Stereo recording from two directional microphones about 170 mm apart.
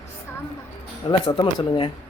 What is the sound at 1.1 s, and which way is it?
Speech, 30° left (ahead or behind).